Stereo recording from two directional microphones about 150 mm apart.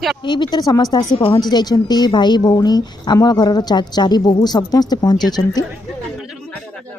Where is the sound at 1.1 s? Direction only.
40° left (ahead or behind).